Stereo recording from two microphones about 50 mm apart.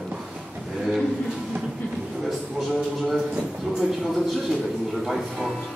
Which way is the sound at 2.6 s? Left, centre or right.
Centre.